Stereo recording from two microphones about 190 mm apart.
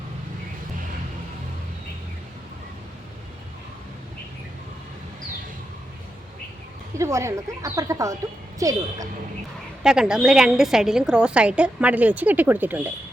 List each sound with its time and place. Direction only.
7.0 s a woman's voice: 15° right (ahead or behind)
9.8 s a woman's voice: 5° right (ahead or behind)